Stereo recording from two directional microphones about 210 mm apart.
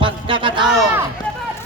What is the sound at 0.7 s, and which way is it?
Speech, 5° right (ahead or behind).